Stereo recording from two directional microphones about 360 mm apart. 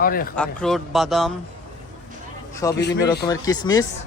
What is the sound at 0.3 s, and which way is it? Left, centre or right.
Speech, centre.